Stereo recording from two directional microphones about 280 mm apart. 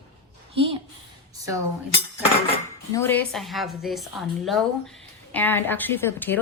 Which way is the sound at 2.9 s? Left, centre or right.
Centre.